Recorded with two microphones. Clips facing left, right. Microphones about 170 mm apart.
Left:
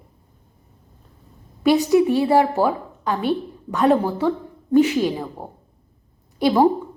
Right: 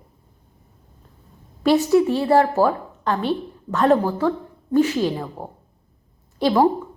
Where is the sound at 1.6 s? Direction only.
15° left (ahead or behind).